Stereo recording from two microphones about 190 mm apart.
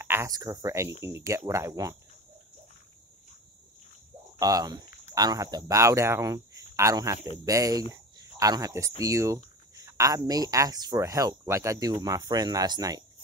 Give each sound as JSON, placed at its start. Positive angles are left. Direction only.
{"t": 0.0, "sound": "speech", "side_deg": -15}
{"t": 4.4, "sound": "speech", "side_deg": -20}